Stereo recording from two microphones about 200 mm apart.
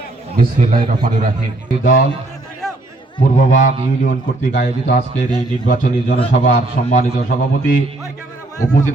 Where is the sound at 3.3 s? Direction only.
40° left (ahead or behind).